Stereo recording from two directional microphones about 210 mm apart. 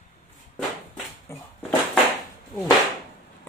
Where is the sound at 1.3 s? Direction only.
15° left (ahead or behind).